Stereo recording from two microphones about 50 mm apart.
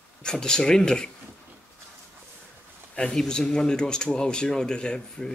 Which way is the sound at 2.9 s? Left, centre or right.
Centre.